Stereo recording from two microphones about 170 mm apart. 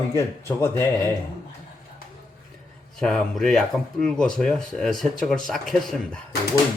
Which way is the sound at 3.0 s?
5° left (ahead or behind).